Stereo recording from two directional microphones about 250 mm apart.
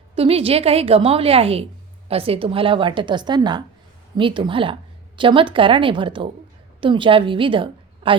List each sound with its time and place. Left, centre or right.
0.2 s a woman's voice: right